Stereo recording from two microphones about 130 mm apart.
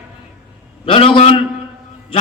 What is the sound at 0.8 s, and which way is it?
A man's voice, 45° left (ahead or behind).